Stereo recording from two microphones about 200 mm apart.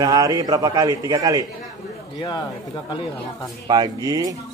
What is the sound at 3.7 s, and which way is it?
Speech, 20° right (ahead or behind).